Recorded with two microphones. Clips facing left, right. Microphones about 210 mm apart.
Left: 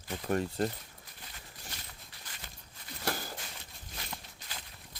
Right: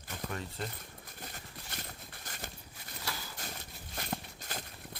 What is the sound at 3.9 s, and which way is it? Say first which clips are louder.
Walk: right 7 dB; 50° right (ahead or behind).